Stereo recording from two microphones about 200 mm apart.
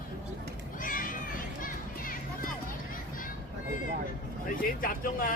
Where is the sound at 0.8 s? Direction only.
45° left (ahead or behind).